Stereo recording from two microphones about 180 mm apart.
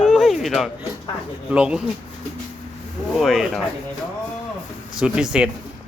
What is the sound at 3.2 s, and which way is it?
Speech, centre (ahead or behind).